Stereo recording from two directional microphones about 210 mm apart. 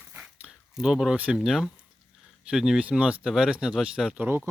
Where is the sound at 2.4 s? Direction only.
5° right (ahead or behind).